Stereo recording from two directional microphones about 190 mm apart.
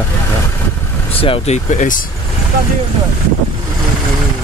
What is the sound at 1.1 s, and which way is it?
Speech, 30° left (ahead or behind).